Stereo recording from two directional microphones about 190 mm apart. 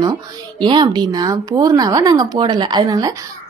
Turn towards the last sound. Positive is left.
turn(degrees=-20)  # may be behind; listen again after turning